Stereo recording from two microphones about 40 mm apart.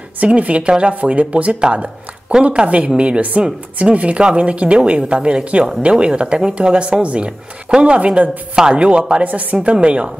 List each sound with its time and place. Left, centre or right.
0.3 s speech: right
1.7 s a sound: right
2.4 s a woman's voice: right
9.3 s speech: right
9.7 s a woman's voice: right